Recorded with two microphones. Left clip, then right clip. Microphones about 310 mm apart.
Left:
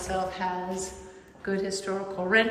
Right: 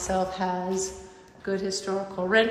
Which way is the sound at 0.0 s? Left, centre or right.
Centre.